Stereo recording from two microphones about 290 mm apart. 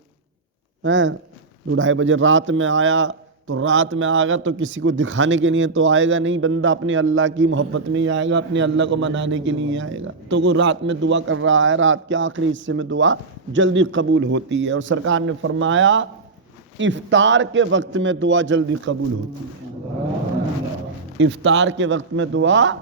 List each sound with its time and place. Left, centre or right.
0.8 s speech: right
21.2 s speech: right